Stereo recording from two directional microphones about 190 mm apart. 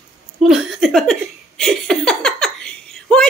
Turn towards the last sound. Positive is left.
turn(degrees=5)  # may be behind; listen again after turning